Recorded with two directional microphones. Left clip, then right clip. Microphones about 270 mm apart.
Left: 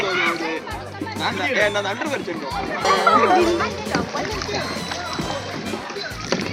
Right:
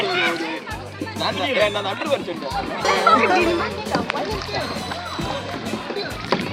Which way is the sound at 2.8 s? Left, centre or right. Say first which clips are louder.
Even; centre.